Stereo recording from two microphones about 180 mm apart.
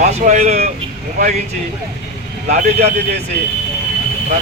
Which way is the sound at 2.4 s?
40° right (ahead or behind).